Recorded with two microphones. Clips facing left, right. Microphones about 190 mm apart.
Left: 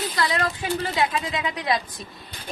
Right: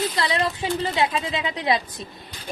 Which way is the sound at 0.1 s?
25° right (ahead or behind).